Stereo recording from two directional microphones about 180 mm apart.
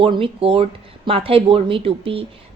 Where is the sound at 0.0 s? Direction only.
30° right (ahead or behind).